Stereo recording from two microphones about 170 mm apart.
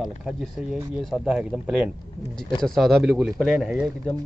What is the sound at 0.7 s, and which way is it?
Speech, 5° right (ahead or behind).